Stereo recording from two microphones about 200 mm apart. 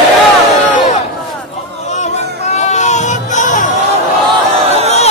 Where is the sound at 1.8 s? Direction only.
35° left (ahead or behind).